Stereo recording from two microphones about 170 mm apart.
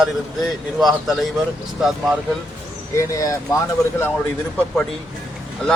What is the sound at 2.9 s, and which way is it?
Speech, 20° left (ahead or behind).